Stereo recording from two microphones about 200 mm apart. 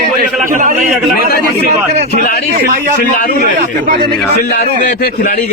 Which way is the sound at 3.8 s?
45° right (ahead or behind).